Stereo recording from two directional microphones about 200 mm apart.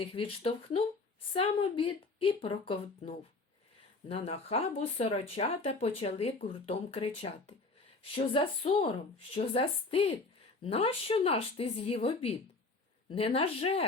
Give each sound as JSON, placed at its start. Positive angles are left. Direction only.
{"t": 0.0, "sound": "speech", "side_deg": 25}